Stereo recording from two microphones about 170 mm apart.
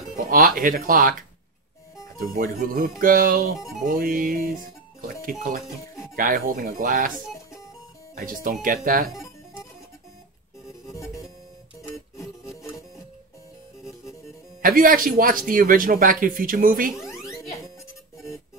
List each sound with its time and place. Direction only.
0.3 s speech: 55° right (ahead or behind)
2.3 s speech: 55° right (ahead or behind)
5.0 s music: 55° right (ahead or behind)
6.1 s speech: 55° right (ahead or behind)
8.1 s speech: 55° right (ahead or behind)
14.6 s speech: 55° right (ahead or behind)
17.1 s music: 20° left (ahead or behind)